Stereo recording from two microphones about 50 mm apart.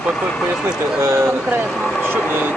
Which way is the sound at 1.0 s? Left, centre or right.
Right.